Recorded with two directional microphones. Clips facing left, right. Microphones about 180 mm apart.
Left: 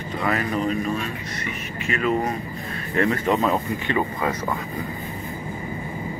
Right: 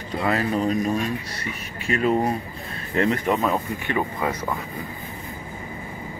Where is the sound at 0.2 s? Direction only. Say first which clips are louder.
Right 1 dB; 30° right (ahead or behind).